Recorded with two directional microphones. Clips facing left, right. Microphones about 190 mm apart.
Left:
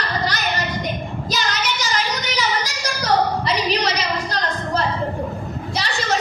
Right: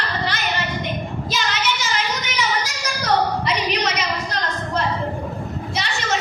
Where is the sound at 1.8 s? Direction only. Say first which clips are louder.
Left 1 dB; 35° left (ahead or behind).